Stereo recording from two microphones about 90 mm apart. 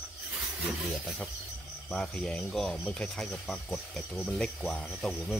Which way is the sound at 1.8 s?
5° left (ahead or behind).